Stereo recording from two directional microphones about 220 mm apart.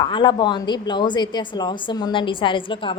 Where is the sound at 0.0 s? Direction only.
20° left (ahead or behind).